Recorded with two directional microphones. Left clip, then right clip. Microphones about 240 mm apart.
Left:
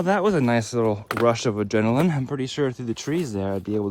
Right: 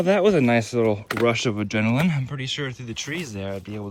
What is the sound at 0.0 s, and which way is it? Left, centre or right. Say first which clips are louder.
Speech: right 2 dB; centre.